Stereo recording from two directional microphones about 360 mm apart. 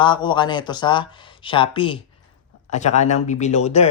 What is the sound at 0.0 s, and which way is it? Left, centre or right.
Speech, centre.